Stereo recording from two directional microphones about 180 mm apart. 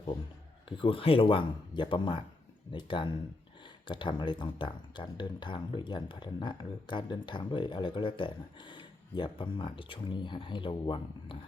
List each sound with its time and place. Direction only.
0.8 s speech: 30° left (ahead or behind)